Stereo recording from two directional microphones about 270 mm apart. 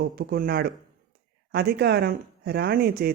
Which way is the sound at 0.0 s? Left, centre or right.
Right.